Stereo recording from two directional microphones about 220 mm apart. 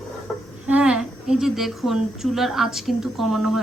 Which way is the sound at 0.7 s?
5° right (ahead or behind).